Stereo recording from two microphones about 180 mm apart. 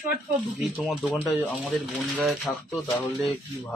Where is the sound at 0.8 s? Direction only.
5° right (ahead or behind).